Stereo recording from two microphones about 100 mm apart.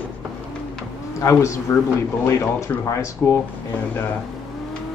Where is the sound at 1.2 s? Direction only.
30° left (ahead or behind).